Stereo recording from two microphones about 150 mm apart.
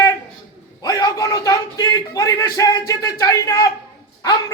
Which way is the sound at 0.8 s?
25° left (ahead or behind).